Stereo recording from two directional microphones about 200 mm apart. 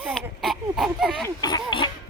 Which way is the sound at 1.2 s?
20° left (ahead or behind).